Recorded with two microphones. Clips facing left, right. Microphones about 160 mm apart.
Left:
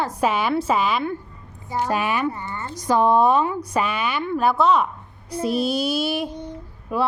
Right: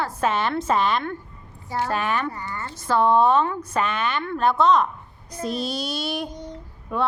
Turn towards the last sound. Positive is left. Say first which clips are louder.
# left 2 dB
turn(degrees=5)  # may be behind; listen again after turning